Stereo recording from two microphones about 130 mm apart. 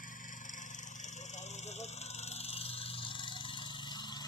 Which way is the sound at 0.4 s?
80° left.